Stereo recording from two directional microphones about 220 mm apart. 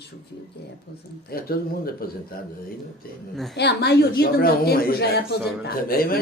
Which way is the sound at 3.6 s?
50° left (ahead or behind).